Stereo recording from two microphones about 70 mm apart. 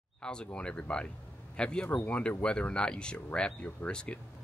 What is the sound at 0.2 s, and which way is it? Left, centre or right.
Speech, centre.